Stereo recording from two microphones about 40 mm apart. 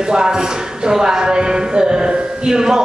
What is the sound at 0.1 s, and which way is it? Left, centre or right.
Speech, centre.